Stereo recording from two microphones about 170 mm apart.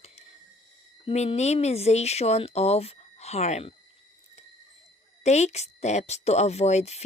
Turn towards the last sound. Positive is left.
turn(degrees=40)  # may be behind; listen again after turning